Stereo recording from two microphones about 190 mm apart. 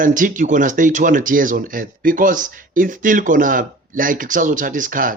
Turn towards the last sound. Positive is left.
turn(degrees=-45)  # may be behind; listen again after turning